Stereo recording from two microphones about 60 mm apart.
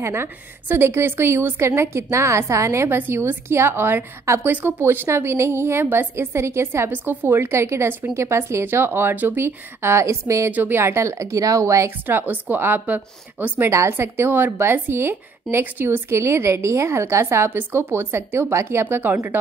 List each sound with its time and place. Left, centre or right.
0.0 s a woman's voice: right
3.0 s a woman's voice: right
9.8 s a woman's voice: right
10.5 s a woman's voice: right
10.8 s speech: right
12.1 s a woman's voice: right
13.6 s a woman's voice: right